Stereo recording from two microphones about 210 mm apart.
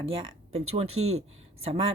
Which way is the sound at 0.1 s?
25° right (ahead or behind).